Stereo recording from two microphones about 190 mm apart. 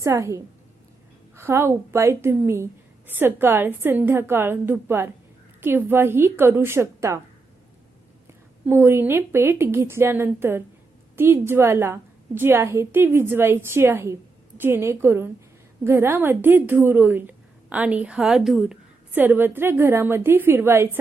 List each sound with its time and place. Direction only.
0.0 s a woman's voice: 15° right (ahead or behind)
8.6 s a woman's voice: 10° right (ahead or behind)